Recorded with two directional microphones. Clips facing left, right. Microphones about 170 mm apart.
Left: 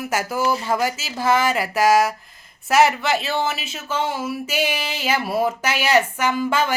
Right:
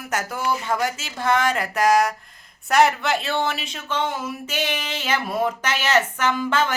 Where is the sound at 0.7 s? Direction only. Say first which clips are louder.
Left 2 dB; 5° left (ahead or behind).